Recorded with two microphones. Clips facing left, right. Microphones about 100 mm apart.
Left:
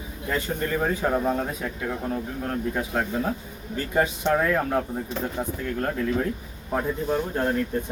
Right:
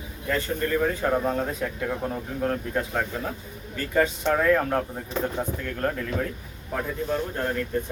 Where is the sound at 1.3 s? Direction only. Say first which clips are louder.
Even; 5° left (ahead or behind).